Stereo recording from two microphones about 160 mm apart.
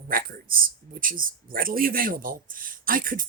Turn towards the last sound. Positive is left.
turn(degrees=-60)  # may be behind; listen again after turning